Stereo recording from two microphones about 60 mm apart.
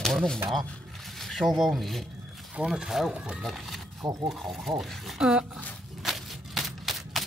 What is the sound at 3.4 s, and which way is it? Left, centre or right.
Speech, centre.